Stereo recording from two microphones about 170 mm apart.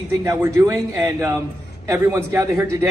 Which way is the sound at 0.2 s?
15° right (ahead or behind).